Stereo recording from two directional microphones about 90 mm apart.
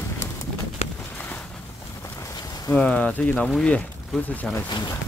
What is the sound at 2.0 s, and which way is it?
Boat, 30° left (ahead or behind).